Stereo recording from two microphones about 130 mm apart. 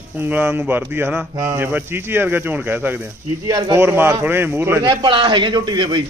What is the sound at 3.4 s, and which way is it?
Speech, 30° right (ahead or behind).